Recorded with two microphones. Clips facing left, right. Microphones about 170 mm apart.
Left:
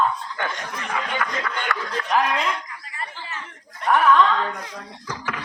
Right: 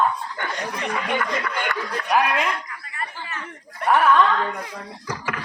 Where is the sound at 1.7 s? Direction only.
70° left (ahead or behind).